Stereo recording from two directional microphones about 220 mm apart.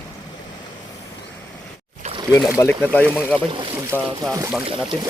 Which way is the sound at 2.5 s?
10° left (ahead or behind).